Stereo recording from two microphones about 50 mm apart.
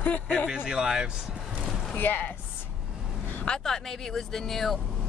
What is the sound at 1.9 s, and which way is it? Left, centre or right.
Speech, left.